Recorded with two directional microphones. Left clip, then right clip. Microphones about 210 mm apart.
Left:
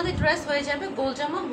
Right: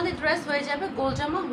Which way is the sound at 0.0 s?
5° right (ahead or behind).